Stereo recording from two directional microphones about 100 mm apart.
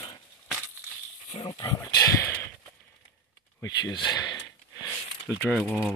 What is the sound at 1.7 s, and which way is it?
Speech, 30° left (ahead or behind).